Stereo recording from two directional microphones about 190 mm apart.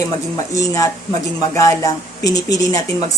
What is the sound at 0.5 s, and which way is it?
A woman's voice, 15° left (ahead or behind).